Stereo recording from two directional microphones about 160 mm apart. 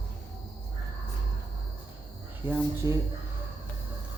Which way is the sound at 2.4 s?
15° right (ahead or behind).